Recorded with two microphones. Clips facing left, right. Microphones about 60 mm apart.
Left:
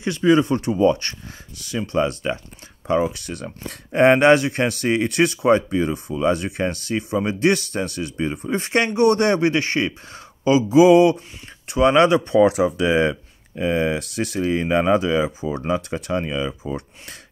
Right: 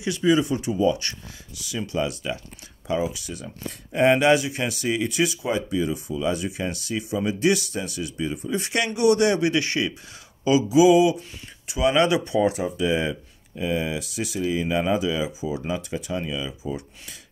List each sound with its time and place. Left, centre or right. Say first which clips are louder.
0.0 s speech: left 4 dB; left
12.4 s speech: left 9 dB; left